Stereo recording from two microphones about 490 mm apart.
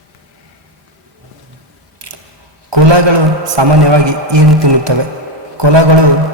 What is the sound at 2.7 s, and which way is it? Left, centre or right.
A man's voice, right.